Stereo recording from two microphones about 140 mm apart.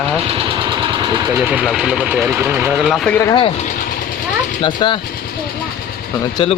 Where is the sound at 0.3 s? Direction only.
40° right (ahead or behind).